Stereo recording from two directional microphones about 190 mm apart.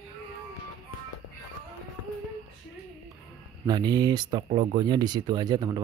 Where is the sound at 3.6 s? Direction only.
20° right (ahead or behind).